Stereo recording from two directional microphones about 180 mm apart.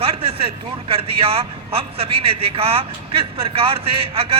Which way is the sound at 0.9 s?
30° right (ahead or behind).